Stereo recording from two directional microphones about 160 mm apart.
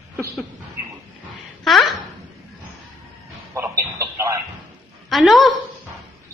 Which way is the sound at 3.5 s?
15° right (ahead or behind).